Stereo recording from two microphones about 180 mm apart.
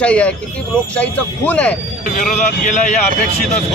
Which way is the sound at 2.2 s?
45° left (ahead or behind).